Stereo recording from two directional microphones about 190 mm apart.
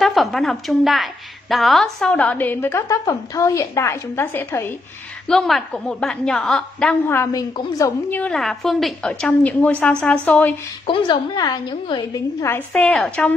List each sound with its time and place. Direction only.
0.0 s a woman's voice: centre (ahead or behind)
10.9 s a woman's voice: 25° left (ahead or behind)
12.4 s a woman's voice: 10° left (ahead or behind)